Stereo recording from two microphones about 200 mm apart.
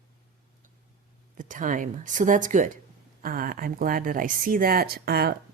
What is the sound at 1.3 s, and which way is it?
Speech, 40° right (ahead or behind).